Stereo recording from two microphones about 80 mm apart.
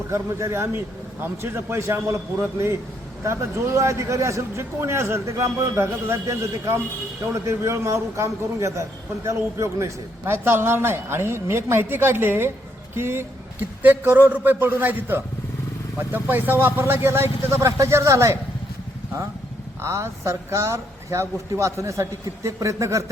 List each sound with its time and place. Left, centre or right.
0.1 s a man's voice: right
19.8 s a man's voice: right